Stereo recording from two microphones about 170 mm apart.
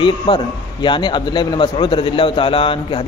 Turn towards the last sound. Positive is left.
turn(degrees=30)  # may be behind; listen again after turning